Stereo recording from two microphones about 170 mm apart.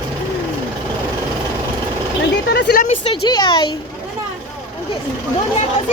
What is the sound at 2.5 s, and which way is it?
Speech, 75° left (ahead or behind).